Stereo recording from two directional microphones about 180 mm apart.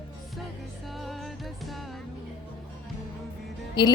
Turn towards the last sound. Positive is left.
turn(degrees=25)  # may be behind; listen again after turning